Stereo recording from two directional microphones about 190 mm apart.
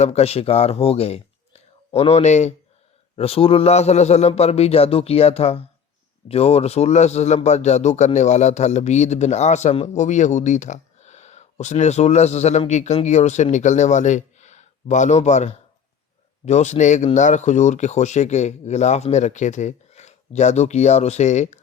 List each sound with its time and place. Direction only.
0.0 s a man's voice: 35° left (ahead or behind)